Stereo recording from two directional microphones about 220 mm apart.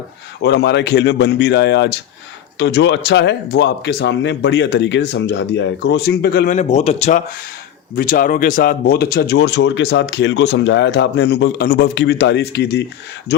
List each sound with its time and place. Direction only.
0.4 s speech: 50° left (ahead or behind)
6.5 s speech: 30° left (ahead or behind); by 12.8 s 50° left (ahead or behind)